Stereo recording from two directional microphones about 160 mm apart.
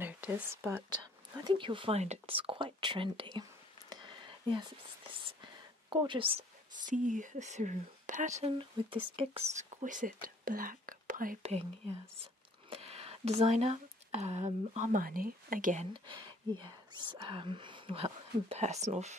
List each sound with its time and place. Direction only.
0.0 s speech: 15° right (ahead or behind)
1.4 s speech: 30° right (ahead or behind)
3.9 s a sound: 25° right (ahead or behind)
5.9 s speech: 30° right (ahead or behind)
6.9 s speech: 50° right (ahead or behind)
8.4 s speech: 35° right (ahead or behind); by 11.3 s 60° right (ahead or behind)
11.4 s speech: 40° right (ahead or behind)
15.9 s speech: 30° right (ahead or behind)